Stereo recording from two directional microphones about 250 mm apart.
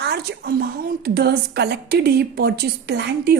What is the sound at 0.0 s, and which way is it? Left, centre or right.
A woman's voice, right.